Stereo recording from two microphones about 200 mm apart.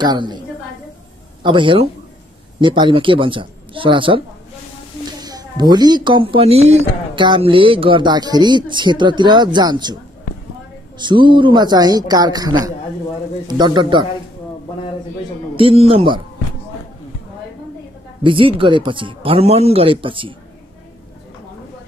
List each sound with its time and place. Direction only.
0.0 s speech: 20° right (ahead or behind)
1.4 s speech: 25° right (ahead or behind)
5.2 s speech: 20° right (ahead or behind)
11.0 s speech: 25° right (ahead or behind)
15.5 s speech: 30° right (ahead or behind)
18.2 s speech: 25° right (ahead or behind)